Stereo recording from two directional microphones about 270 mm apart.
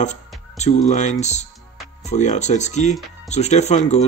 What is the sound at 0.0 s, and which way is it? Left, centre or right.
Speech, left.